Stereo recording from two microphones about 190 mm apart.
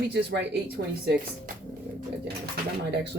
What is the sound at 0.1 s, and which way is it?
Speech, 60° right (ahead or behind).